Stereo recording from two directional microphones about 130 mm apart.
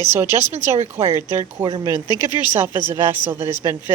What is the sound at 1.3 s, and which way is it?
Speech, 20° right (ahead or behind).